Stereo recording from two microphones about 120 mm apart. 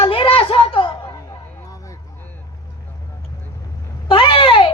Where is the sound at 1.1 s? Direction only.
25° left (ahead or behind).